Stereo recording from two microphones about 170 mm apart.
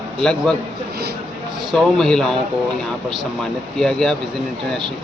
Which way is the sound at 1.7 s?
5° left (ahead or behind).